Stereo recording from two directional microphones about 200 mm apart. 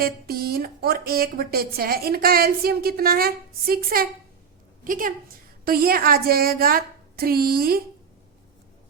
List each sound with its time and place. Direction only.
0.0 s a woman's voice: 50° right (ahead or behind)